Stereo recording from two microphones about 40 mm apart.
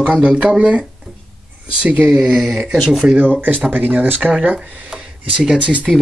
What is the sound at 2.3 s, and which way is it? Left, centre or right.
Speech, centre.